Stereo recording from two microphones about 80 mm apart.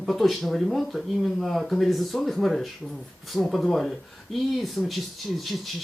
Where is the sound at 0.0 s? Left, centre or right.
Centre.